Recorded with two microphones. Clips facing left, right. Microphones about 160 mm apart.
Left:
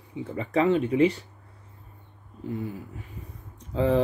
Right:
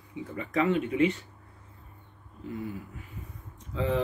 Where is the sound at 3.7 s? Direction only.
35° left (ahead or behind).